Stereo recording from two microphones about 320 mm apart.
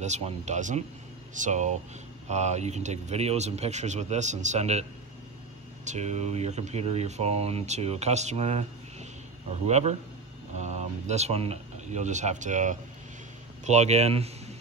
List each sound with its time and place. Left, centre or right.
0.0 s speech: right
5.9 s speech: right